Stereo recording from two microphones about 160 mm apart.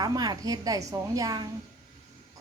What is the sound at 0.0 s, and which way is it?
A woman's voice, 25° right (ahead or behind).